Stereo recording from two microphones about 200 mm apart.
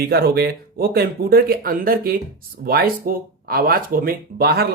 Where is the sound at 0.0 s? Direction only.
50° right (ahead or behind).